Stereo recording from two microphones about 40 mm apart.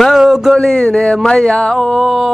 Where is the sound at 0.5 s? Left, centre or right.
Centre.